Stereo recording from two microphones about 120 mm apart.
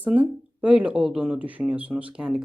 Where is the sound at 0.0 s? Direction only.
10° right (ahead or behind).